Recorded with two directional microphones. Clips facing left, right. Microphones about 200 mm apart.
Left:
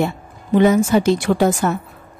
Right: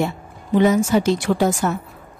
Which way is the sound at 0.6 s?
60° left (ahead or behind).